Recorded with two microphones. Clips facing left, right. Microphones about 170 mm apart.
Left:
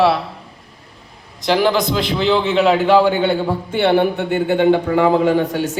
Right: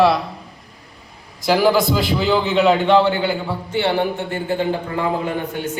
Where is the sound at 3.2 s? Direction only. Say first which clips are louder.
Left 5 dB; 30° left (ahead or behind).